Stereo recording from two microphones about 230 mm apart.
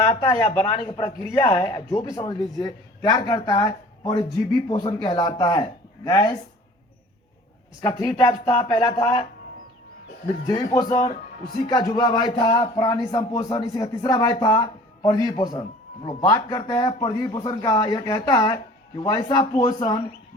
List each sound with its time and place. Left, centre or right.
0.0 s speech: centre
7.8 s speech: centre
10.4 s a man's voice: centre